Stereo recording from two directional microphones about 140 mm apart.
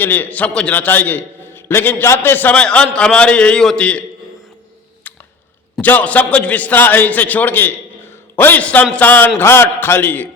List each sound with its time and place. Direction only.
0.0 s a man's voice: 15° left (ahead or behind)
5.0 s a sound: 10° left (ahead or behind)
5.8 s a man's voice: 10° left (ahead or behind)